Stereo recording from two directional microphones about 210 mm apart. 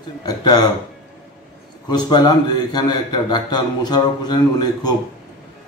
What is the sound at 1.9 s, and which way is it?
A man's voice, 20° left (ahead or behind).